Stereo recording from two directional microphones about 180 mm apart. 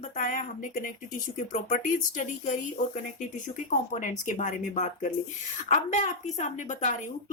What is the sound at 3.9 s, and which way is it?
A woman's voice, 45° left (ahead or behind).